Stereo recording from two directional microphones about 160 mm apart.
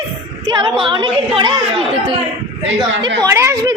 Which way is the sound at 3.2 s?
15° right (ahead or behind).